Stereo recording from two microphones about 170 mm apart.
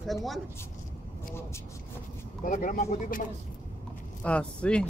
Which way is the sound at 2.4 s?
50° left (ahead or behind).